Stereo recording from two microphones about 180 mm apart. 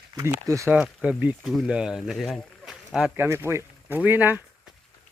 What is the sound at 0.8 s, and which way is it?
Speech, 5° right (ahead or behind).